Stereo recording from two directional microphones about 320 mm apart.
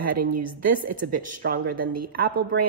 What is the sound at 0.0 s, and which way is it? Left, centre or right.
Speech, right.